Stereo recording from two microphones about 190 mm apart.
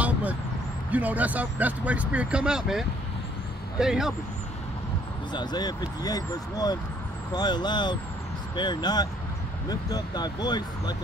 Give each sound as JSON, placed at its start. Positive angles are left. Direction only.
{"t": 0.0, "sound": "vehicle", "side_deg": -5}
{"t": 0.9, "sound": "speech", "side_deg": -10}
{"t": 5.3, "sound": "speech", "side_deg": 20}